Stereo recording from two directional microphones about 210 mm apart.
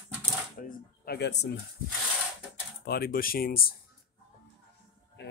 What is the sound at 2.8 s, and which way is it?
Speech, 45° left (ahead or behind).